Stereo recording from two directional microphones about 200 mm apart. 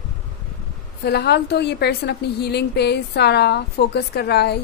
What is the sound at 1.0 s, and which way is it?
A woman's voice, 55° left (ahead or behind).